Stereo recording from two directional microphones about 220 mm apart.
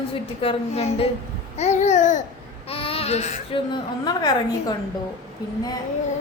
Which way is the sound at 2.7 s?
25° left (ahead or behind).